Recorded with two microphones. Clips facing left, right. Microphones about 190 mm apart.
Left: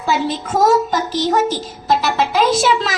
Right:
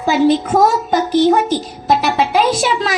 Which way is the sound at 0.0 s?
45° right (ahead or behind).